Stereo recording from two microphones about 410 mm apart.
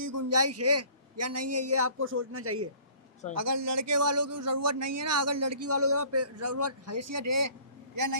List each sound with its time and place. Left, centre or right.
0.0 s a man's voice: right